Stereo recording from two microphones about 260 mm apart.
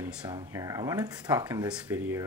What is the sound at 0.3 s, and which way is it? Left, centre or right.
Speech, centre.